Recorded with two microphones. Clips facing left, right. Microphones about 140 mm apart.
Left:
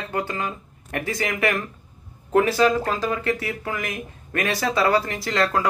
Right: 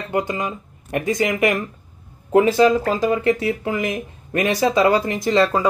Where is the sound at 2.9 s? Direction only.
15° right (ahead or behind).